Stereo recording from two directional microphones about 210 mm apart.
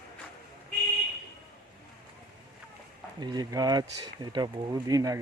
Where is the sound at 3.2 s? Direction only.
20° right (ahead or behind).